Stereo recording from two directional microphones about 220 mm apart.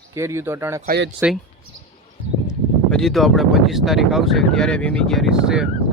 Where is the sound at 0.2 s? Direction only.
10° right (ahead or behind).